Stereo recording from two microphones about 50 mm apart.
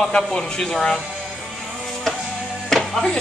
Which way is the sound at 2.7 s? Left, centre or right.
Centre.